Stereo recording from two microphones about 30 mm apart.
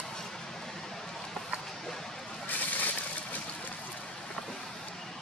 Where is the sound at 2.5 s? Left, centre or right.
Left.